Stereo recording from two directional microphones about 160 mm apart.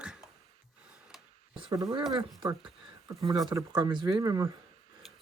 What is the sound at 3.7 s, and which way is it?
Speech, 30° right (ahead or behind).